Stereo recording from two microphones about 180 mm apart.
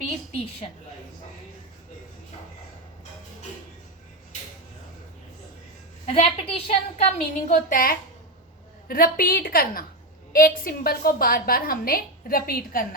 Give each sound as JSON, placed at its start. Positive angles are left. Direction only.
{"t": 6.1, "sound": "a woman's voice", "side_deg": 35}